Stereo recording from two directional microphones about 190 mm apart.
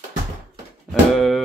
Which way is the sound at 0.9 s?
Centre (ahead or behind).